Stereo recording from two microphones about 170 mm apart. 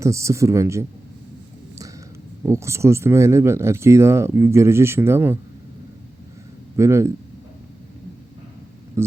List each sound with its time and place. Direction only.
0.0 s speech: 15° right (ahead or behind)
2.5 s speech: 15° right (ahead or behind)
6.7 s speech: 15° right (ahead or behind)
9.0 s speech: 15° right (ahead or behind)